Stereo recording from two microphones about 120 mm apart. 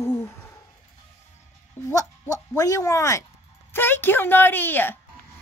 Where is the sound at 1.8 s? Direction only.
25° left (ahead or behind).